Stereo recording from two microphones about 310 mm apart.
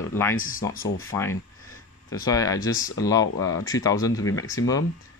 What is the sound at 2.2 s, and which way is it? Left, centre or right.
Speech, centre.